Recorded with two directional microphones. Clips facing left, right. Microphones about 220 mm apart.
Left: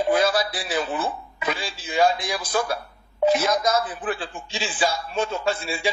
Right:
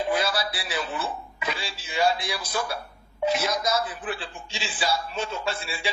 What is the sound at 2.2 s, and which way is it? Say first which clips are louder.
Speech: left 5 dB; 45° left (ahead or behind).